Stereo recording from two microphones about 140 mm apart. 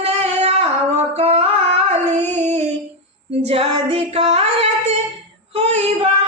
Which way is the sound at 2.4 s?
50° right (ahead or behind).